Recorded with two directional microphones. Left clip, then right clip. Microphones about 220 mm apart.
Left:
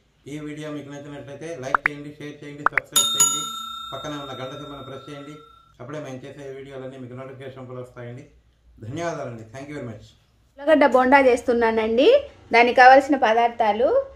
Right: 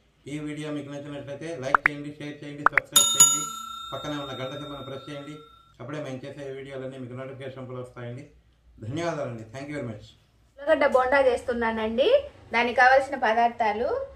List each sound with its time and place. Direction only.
0.2 s a man's voice: centre (ahead or behind)
10.6 s a woman's voice: 45° left (ahead or behind)